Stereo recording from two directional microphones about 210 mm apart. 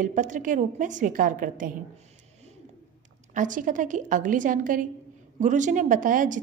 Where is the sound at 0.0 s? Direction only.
35° right (ahead or behind).